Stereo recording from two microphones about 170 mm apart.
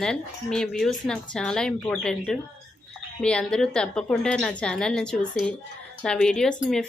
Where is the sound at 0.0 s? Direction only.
5° left (ahead or behind).